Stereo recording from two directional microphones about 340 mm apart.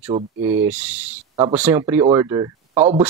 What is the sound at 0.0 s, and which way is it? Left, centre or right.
Speech, centre.